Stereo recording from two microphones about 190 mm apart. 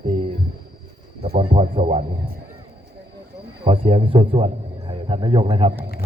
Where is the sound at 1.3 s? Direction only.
30° right (ahead or behind).